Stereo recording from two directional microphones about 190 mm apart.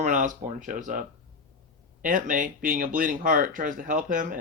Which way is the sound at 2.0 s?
45° right (ahead or behind).